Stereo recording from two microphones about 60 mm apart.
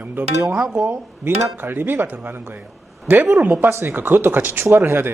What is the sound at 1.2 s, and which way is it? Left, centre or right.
Speech, right.